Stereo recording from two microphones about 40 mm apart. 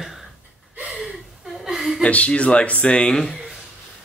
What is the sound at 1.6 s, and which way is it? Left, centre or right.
Chuckle, centre.